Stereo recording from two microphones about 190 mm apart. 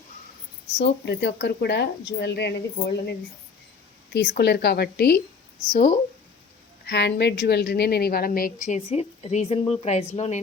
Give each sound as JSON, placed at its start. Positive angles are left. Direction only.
{"t": 0.8, "sound": "speech", "side_deg": 60}
{"t": 5.7, "sound": "a woman's voice", "side_deg": 45}
{"t": 6.8, "sound": "a woman's voice", "side_deg": 65}